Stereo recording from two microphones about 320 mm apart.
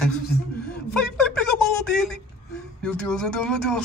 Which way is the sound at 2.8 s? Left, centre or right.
Centre.